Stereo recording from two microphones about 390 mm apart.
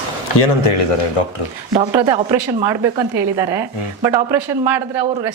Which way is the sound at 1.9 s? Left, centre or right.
Centre.